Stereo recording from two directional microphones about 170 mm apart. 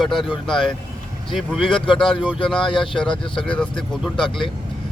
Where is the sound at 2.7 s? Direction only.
30° left (ahead or behind).